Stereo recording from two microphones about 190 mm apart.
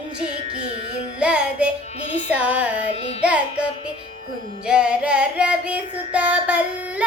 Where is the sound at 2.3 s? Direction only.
10° right (ahead or behind).